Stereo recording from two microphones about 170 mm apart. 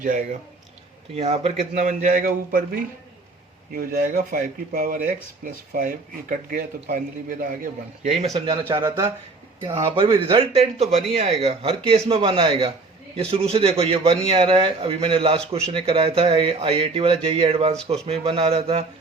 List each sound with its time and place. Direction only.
0.0 s a man's voice: 50° right (ahead or behind)
1.1 s a man's voice: 40° right (ahead or behind); by 8.1 s 55° right (ahead or behind)
8.1 s a man's voice: 40° right (ahead or behind)
8.7 s a man's voice: 20° right (ahead or behind)